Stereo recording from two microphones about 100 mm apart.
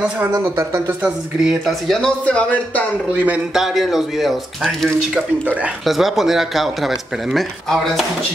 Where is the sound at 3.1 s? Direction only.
15° right (ahead or behind).